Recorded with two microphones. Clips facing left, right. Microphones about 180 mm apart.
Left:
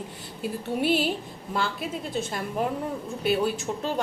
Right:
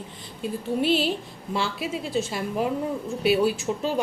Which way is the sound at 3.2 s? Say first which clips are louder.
Right 3 dB; 10° right (ahead or behind).